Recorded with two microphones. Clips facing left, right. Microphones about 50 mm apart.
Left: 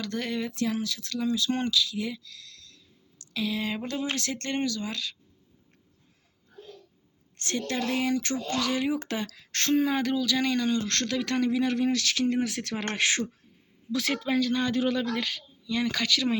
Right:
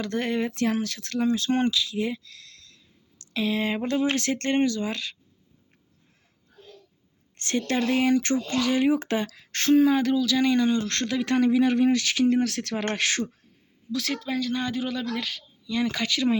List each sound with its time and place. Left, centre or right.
0.0 s speech: right
0.5 s speech: right
7.3 s a woman's voice: right
8.6 s speech: right
9.7 s speech: centre
10.5 s speech: centre
12.4 s speech: centre
13.0 s speech: left
14.3 s speech: centre
15.9 s speech: centre